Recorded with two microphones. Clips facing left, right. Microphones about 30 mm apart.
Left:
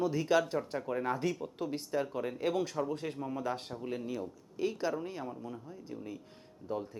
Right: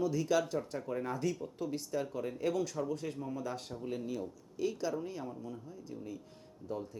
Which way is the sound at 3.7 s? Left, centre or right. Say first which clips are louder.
Left 1 dB; left.